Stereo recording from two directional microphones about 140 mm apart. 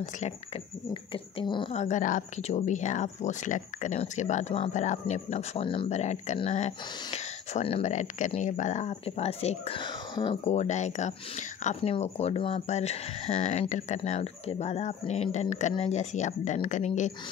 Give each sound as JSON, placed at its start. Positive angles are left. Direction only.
{"t": 1.1, "sound": "speech", "side_deg": 35}
{"t": 1.7, "sound": "speech", "side_deg": 55}
{"t": 5.9, "sound": "speech", "side_deg": 55}
{"t": 10.4, "sound": "speech", "side_deg": 55}